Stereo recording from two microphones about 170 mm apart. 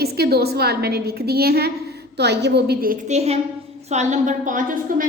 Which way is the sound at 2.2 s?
80° right.